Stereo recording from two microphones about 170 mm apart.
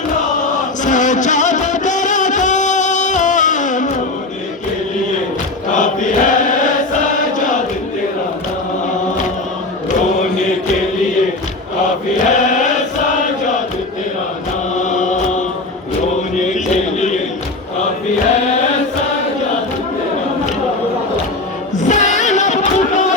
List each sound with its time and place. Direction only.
0.9 s music: 45° left (ahead or behind)
5.7 s mantra: 50° left (ahead or behind)
7.3 s chant: 50° left (ahead or behind)
12.2 s chant: 45° left (ahead or behind)
14.8 s chant: 45° left (ahead or behind)
16.3 s a sound: 45° left (ahead or behind)
21.8 s music: 45° left (ahead or behind)